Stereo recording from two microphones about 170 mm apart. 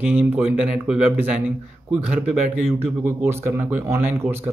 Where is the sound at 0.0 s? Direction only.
10° right (ahead or behind).